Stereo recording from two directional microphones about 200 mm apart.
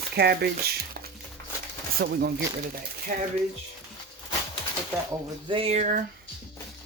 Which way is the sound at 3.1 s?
40° right (ahead or behind).